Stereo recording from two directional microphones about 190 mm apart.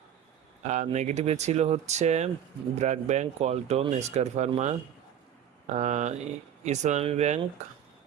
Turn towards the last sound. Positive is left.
turn(degrees=-35)  # may be behind; listen again after turning